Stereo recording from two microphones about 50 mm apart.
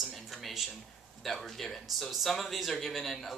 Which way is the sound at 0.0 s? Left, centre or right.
Centre.